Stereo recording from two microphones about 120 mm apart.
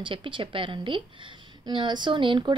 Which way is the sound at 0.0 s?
45° right (ahead or behind).